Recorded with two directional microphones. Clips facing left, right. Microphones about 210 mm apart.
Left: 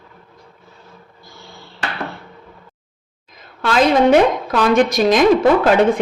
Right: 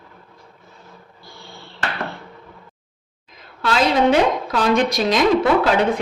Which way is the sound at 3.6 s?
50° left (ahead or behind).